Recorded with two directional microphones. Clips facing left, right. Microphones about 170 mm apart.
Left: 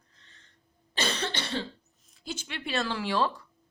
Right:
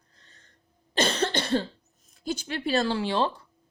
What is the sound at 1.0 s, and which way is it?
Cough, 45° right (ahead or behind).